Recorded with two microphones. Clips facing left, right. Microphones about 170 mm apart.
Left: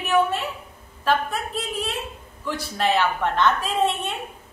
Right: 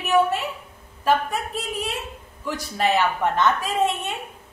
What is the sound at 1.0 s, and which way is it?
Speech, 15° right (ahead or behind).